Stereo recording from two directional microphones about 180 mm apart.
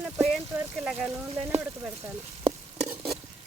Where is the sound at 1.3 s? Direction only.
35° right (ahead or behind).